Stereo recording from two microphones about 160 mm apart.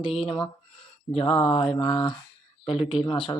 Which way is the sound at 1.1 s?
35° left (ahead or behind).